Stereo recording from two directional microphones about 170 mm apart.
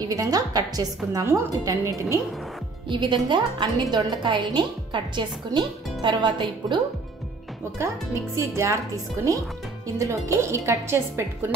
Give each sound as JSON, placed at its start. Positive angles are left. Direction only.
{"t": 0.1, "sound": "a woman's voice", "side_deg": -20}
{"t": 2.9, "sound": "a woman's voice", "side_deg": -30}
{"t": 7.8, "sound": "a woman's voice", "side_deg": -15}